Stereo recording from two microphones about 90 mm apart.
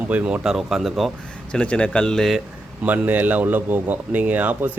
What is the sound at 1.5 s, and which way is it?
Speech, 10° left (ahead or behind).